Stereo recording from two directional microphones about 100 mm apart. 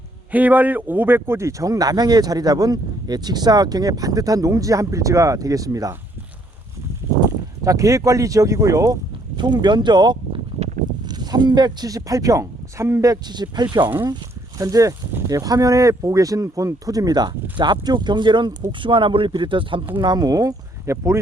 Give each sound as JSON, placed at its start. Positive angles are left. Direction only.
{"t": 0.3, "sound": "speech", "side_deg": -15}
{"t": 7.2, "sound": "speech", "side_deg": -35}
{"t": 9.4, "sound": "speech", "side_deg": -50}
{"t": 20.0, "sound": "speech", "side_deg": -45}